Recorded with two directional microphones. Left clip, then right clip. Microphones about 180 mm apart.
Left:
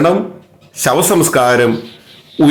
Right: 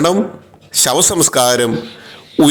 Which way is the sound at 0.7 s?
30° right (ahead or behind).